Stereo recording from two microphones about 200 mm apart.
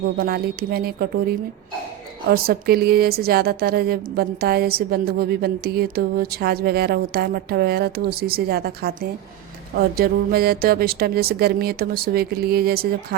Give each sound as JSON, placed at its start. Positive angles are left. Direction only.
{"t": 0.2, "sound": "speech", "side_deg": -50}